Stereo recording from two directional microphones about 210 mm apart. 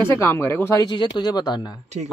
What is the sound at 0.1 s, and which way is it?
Speech, 10° left (ahead or behind).